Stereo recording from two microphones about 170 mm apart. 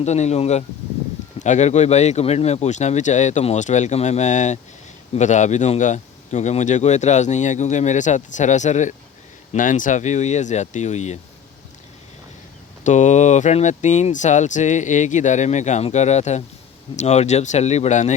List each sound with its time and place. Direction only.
0.0 s a man's voice: 40° left (ahead or behind)
12.8 s a man's voice: 45° left (ahead or behind)